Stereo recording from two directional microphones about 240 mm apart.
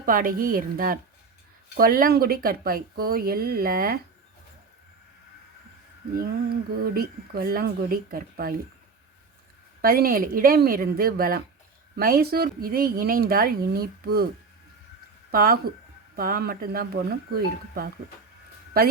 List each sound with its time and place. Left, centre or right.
0.0 s speech: right
6.1 s speech: right
9.8 s speech: right
15.3 s speech: right